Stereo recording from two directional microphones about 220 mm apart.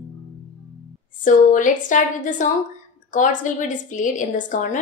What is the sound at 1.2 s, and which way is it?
A woman's voice, 35° left (ahead or behind).